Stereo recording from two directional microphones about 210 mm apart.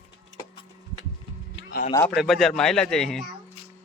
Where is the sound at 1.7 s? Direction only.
40° left (ahead or behind).